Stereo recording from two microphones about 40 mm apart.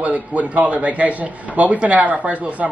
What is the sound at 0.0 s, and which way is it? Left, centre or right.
Speech, right.